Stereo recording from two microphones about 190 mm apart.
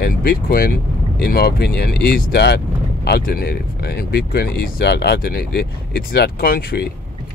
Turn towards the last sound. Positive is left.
turn(degrees=55)  # may be behind; listen again after turning